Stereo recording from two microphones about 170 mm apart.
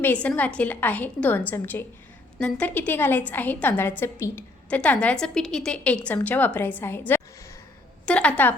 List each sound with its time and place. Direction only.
0.0 s a woman's voice: 10° left (ahead or behind)
7.1 s a sound: 15° left (ahead or behind)
8.0 s a woman's voice: 5° left (ahead or behind)